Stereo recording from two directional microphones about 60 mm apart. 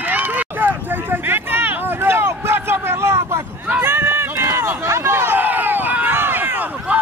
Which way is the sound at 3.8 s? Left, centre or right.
Right.